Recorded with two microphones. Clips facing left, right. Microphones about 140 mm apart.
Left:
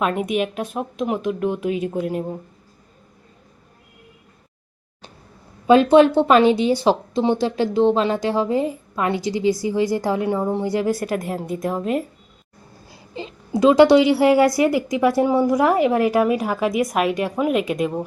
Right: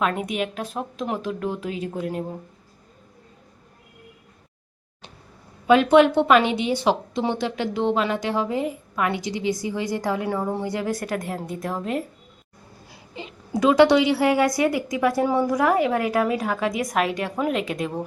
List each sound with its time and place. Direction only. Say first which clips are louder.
0.0 s a woman's voice: left 4 dB; 20° left (ahead or behind)
5.6 s a woman's voice: left 3 dB; 30° left (ahead or behind)
13.1 s a woman's voice: left 4 dB; 30° left (ahead or behind)